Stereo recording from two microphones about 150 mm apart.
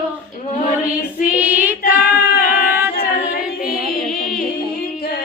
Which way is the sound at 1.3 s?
10° right (ahead or behind).